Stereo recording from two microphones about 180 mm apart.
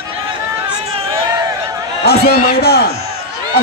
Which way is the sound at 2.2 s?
60° left (ahead or behind).